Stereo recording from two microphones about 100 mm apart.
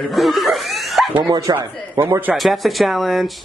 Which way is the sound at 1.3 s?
35° right (ahead or behind).